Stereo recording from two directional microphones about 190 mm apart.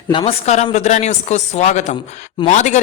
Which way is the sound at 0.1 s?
30° left (ahead or behind).